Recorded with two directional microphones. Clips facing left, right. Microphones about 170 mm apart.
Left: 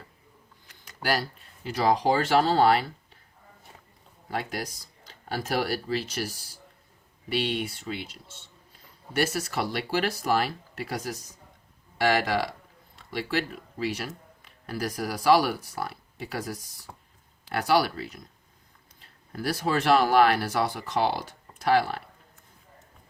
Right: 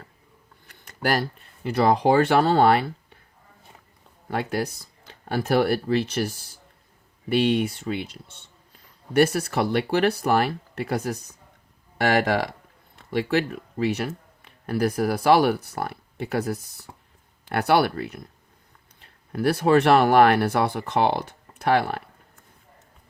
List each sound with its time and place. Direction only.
0.7 s speech: 55° right (ahead or behind)
5.0 s speech: 55° right (ahead or behind)
7.3 s speech: 50° right (ahead or behind)
9.1 s speech: 60° right (ahead or behind)
19.3 s speech: 60° right (ahead or behind)